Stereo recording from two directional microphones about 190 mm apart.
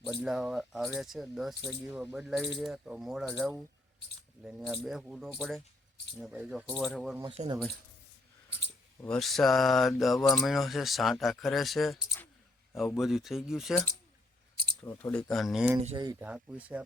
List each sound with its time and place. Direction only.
0.2 s speech: centre (ahead or behind)
7.4 s speech: 35° right (ahead or behind)
9.0 s speech: centre (ahead or behind)
14.8 s speech: 10° left (ahead or behind)
16.0 s speech: 20° right (ahead or behind)
16.2 s speech: 5° right (ahead or behind)